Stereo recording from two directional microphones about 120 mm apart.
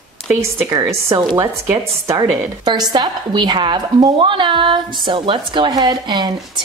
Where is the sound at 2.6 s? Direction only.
35° right (ahead or behind).